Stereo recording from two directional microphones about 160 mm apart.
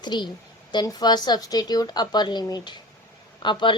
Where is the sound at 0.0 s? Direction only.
30° left (ahead or behind).